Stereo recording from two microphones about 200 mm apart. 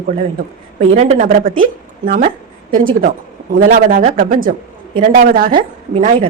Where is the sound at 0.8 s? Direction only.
35° right (ahead or behind).